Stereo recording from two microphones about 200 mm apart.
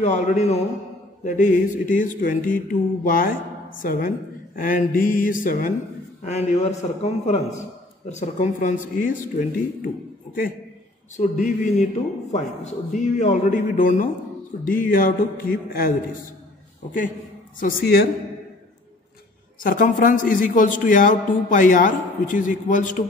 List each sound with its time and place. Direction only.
0.0 s a man's voice: 35° left (ahead or behind)
11.1 s a man's voice: 40° left (ahead or behind)
17.6 s speech: 45° left (ahead or behind)
19.6 s a man's voice: 45° left (ahead or behind)